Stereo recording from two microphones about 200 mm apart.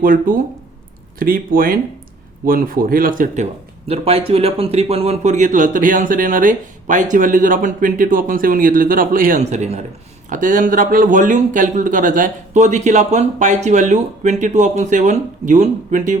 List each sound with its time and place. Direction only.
0.0 s a man's voice: 45° right (ahead or behind)